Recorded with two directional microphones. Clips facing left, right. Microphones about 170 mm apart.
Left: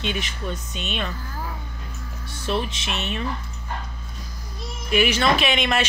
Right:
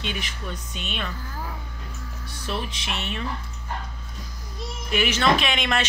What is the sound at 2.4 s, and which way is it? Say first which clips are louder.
Speech: left 5 dB; 25° left (ahead or behind).